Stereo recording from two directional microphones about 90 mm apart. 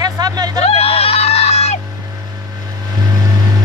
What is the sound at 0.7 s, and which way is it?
Speech, 90° left.